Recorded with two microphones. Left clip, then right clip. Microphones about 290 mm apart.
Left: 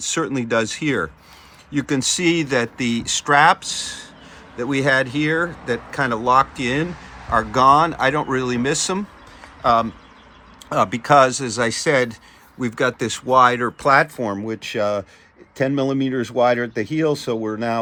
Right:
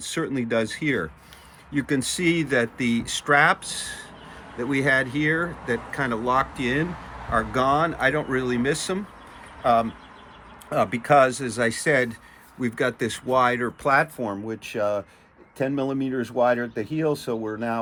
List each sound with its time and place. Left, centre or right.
0.0 s speech: centre